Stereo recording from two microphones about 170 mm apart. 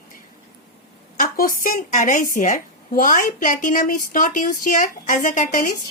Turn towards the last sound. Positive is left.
turn(degrees=50)  # may be behind; listen again after turning